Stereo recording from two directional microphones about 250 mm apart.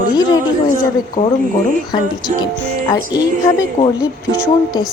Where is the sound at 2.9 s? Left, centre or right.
Centre.